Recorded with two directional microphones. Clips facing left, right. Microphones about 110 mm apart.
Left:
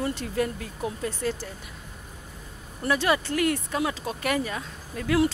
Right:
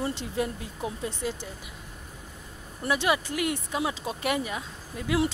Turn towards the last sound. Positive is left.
turn(degrees=-15)  # may be behind; listen again after turning